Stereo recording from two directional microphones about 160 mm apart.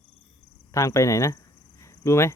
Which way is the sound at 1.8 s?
20° left (ahead or behind).